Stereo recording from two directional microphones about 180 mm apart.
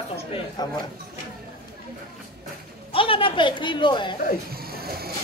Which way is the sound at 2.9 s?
30° left (ahead or behind).